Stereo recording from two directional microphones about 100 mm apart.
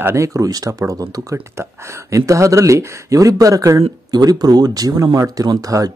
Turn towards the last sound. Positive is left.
turn(degrees=-35)  # may be behind; listen again after turning